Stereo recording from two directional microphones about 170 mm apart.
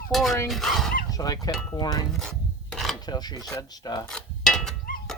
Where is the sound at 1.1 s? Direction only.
20° left (ahead or behind).